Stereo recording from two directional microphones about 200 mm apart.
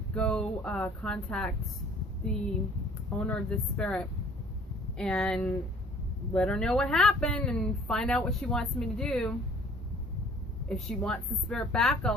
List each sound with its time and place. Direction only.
0.1 s speech: 5° left (ahead or behind)
3.2 s speech: 5° left (ahead or behind)
10.7 s speech: 5° left (ahead or behind)